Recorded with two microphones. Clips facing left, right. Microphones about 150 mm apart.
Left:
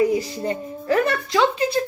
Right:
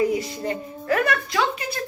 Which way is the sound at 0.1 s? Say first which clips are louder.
Left 2 dB; 30° left (ahead or behind).